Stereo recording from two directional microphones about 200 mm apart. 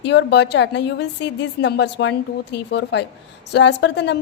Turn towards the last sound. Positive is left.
turn(degrees=60)  # may be behind; listen again after turning